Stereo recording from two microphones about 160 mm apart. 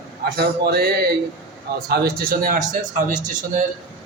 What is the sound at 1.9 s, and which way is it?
Speech, 70° right (ahead or behind).